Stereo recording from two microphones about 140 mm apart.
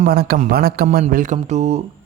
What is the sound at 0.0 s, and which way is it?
A man's voice, 90° right.